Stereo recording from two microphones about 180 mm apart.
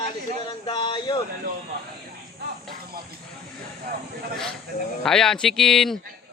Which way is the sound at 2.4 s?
65° right (ahead or behind).